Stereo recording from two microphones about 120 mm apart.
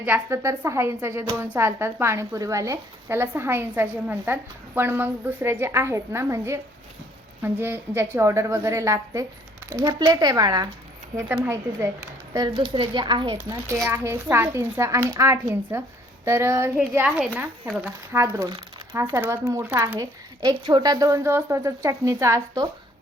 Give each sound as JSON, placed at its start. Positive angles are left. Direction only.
{"t": 0.0, "sound": "speech", "side_deg": -20}
{"t": 12.3, "sound": "speech", "side_deg": -30}
{"t": 12.6, "sound": "speech", "side_deg": -45}
{"t": 13.5, "sound": "a woman's voice", "side_deg": -25}
{"t": 17.7, "sound": "speech", "side_deg": 0}
{"t": 18.1, "sound": "speech", "side_deg": -25}